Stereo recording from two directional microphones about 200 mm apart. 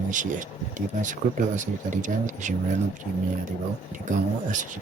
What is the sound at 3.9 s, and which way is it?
Speech, 40° right (ahead or behind).